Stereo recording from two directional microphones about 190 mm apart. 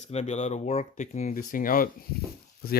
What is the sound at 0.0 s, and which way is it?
Speech, 35° left (ahead or behind).